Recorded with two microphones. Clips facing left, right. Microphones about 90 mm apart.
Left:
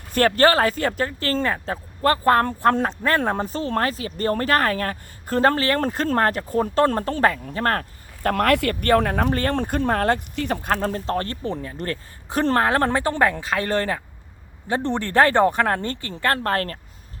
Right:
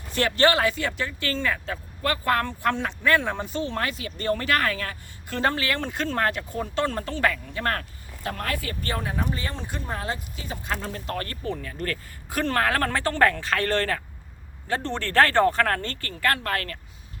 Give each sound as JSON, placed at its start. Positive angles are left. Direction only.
{"t": 0.1, "sound": "speech", "side_deg": 45}
{"t": 8.3, "sound": "speech", "side_deg": 70}
{"t": 11.0, "sound": "speech", "side_deg": 30}
{"t": 16.3, "sound": "speech", "side_deg": 35}